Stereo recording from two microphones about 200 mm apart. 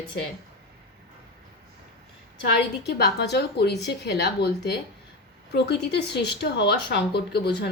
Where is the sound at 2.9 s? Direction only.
55° left (ahead or behind).